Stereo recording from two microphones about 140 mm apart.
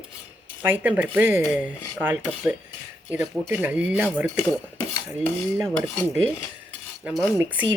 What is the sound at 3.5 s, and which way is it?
Speech, 15° right (ahead or behind).